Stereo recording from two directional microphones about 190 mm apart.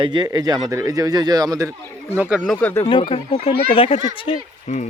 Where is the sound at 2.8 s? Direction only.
25° left (ahead or behind).